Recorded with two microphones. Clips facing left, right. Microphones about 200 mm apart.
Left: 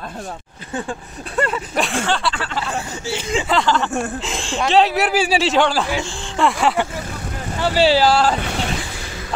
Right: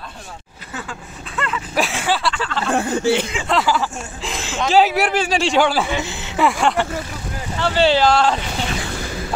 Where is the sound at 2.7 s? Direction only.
55° right (ahead or behind).